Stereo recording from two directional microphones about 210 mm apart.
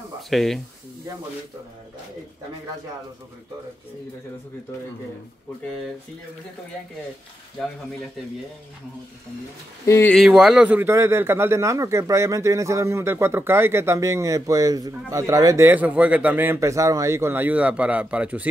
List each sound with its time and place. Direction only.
0.3 s speech: centre (ahead or behind)
7.6 s speech: centre (ahead or behind)
9.8 s speech: 10° left (ahead or behind)
10.1 s a man's voice: centre (ahead or behind)